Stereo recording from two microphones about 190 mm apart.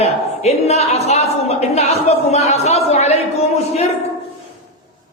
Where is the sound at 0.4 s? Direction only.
35° left (ahead or behind).